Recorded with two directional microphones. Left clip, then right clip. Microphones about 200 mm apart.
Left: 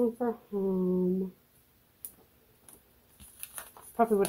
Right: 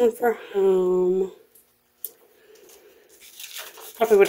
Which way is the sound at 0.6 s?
45° right (ahead or behind).